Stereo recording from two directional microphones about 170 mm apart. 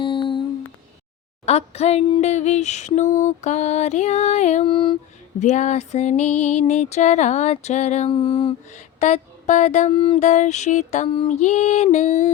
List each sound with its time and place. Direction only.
0.0 s humming: 30° left (ahead or behind)
1.5 s speech: 40° left (ahead or behind)
2.3 s music: 40° left (ahead or behind)
5.4 s music: 45° left (ahead or behind)